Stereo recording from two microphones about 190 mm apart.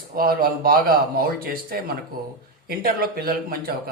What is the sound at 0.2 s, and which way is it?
Speech, 50° right (ahead or behind).